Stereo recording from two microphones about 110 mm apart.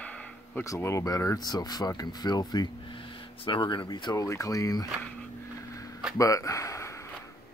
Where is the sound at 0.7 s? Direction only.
25° left (ahead or behind).